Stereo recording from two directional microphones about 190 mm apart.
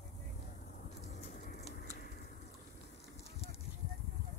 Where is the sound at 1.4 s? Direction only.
35° left (ahead or behind).